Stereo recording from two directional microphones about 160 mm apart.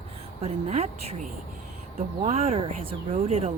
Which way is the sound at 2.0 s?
40° right (ahead or behind).